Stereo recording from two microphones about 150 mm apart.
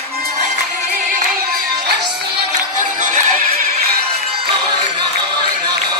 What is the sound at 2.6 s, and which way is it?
Music, 60° right (ahead or behind).